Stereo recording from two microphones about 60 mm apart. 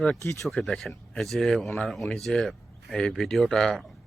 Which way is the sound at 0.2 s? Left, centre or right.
Left.